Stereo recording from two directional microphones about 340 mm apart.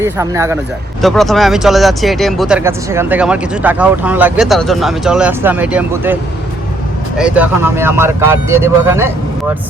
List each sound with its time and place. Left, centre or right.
0.0 s speech: centre
7.2 s speech: centre